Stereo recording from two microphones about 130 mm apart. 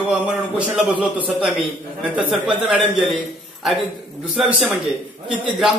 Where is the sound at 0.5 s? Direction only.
10° right (ahead or behind).